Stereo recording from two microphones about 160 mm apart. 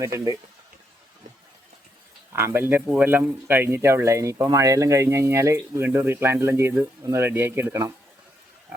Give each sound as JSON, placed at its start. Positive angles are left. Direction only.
{"t": 0.0, "sound": "speech", "side_deg": -20}
{"t": 2.3, "sound": "speech", "side_deg": -15}